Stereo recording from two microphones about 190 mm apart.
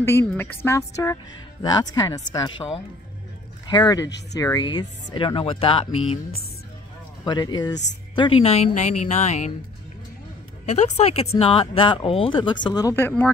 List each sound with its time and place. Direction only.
0.0 s speech: 10° left (ahead or behind); by 6.1 s 30° left (ahead or behind)
7.2 s a woman's voice: 20° left (ahead or behind)
10.6 s a woman's voice: 35° left (ahead or behind); by 13.3 s 10° left (ahead or behind)